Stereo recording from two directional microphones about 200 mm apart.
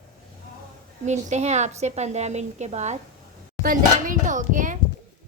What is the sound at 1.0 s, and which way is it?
A woman's voice, 35° right (ahead or behind).